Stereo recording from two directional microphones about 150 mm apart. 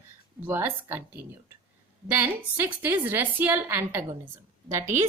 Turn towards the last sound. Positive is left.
turn(degrees=-20)  # may be behind; listen again after turning